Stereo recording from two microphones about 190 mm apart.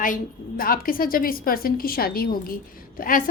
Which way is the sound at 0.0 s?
45° left (ahead or behind).